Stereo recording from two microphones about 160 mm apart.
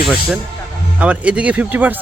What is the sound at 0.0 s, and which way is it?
Speech, 5° right (ahead or behind).